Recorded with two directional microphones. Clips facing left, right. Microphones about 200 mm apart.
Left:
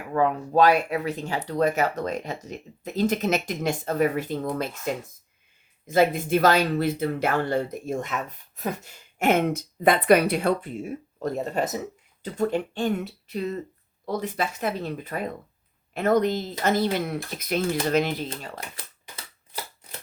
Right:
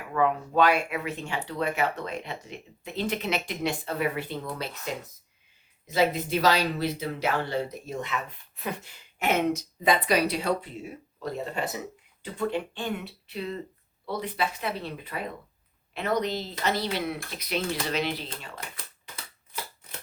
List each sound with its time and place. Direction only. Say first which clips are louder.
0.1 s speech: left 3 dB; 35° left (ahead or behind)
5.8 s speech: left 4 dB; 50° left (ahead or behind)